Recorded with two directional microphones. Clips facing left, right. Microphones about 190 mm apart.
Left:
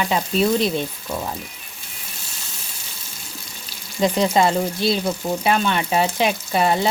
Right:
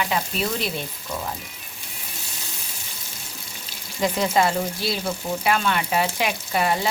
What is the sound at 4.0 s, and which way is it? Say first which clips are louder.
Frying: left 3 dB; 25° left (ahead or behind).